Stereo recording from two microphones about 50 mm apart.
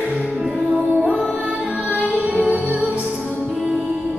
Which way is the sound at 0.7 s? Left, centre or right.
Right.